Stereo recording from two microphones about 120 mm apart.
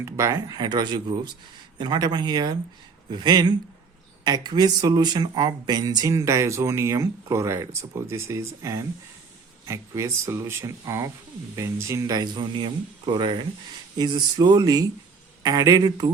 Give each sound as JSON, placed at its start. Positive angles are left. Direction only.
{"t": 0.0, "sound": "speech", "side_deg": -25}